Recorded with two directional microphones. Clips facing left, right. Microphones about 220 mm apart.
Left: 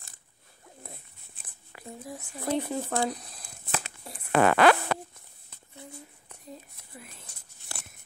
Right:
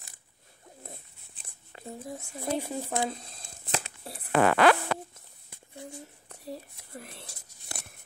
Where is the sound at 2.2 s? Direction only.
10° right (ahead or behind).